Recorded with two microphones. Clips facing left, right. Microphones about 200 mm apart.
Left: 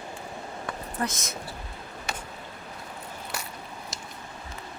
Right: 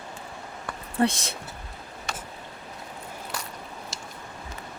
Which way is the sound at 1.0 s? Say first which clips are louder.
Right 8 dB; 30° right (ahead or behind).